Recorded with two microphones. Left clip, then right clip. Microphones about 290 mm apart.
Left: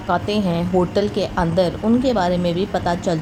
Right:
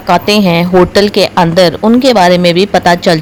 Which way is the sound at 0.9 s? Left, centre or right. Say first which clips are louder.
Right 12 dB; right.